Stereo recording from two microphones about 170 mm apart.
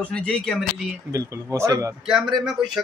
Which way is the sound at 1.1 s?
15° right (ahead or behind).